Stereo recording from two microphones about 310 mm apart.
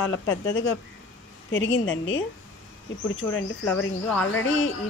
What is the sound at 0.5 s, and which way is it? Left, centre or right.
Speech, left.